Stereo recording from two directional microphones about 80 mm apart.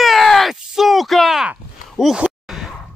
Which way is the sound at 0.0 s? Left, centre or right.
Centre.